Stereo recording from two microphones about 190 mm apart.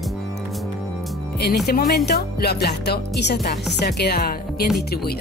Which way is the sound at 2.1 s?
60° left (ahead or behind).